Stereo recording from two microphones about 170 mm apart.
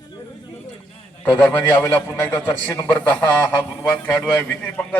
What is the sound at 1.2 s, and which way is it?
A man's voice, 10° left (ahead or behind).